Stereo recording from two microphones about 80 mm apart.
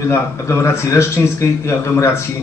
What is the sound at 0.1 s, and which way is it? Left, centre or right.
A man's voice, left.